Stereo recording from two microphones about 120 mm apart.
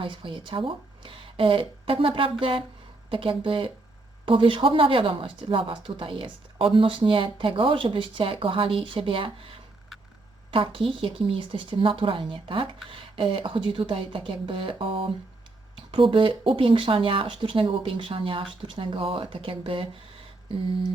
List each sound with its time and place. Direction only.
0.0 s speech: 45° right (ahead or behind)
10.5 s speech: 45° right (ahead or behind)